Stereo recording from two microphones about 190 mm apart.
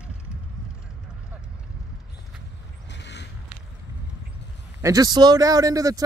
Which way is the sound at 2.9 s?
65° left (ahead or behind).